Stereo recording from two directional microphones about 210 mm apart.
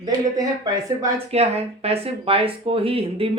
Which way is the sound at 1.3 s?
30° right (ahead or behind).